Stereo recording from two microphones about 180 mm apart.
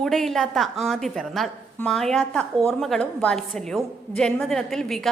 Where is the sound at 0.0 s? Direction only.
Centre (ahead or behind).